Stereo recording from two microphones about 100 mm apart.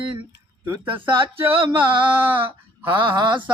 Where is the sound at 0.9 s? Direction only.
20° right (ahead or behind).